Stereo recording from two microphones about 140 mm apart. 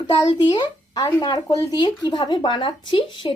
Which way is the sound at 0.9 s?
20° left (ahead or behind).